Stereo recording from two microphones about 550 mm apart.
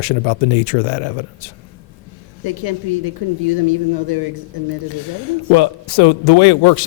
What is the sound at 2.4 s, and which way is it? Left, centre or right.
Speech, right.